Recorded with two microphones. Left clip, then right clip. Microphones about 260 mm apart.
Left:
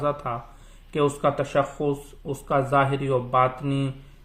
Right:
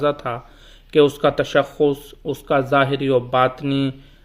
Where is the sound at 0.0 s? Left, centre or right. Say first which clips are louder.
Right 5 dB; right.